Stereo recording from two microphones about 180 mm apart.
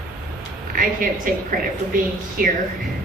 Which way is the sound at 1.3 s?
50° right (ahead or behind).